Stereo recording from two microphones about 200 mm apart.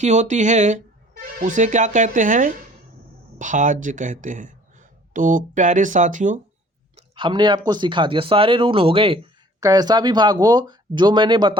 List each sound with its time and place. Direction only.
0.0 s speech: 35° right (ahead or behind)
6.9 s a sound: 25° right (ahead or behind)
7.7 s speech: 25° right (ahead or behind)